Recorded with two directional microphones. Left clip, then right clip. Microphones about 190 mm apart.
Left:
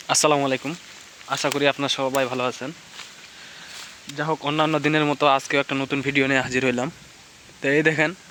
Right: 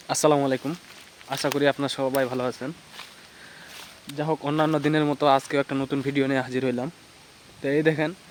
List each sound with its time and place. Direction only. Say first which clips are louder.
0.1 s speech: left 2 dB; 10° right (ahead or behind)
4.4 s speech: left 2 dB; 15° right (ahead or behind)
4.8 s speech: left 3 dB; 5° right (ahead or behind)